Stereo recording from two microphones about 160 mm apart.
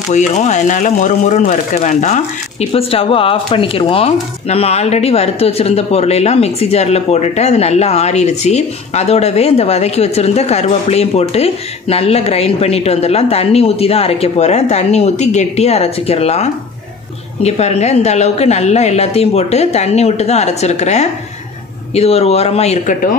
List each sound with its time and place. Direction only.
0.1 s a woman's voice: 45° left (ahead or behind)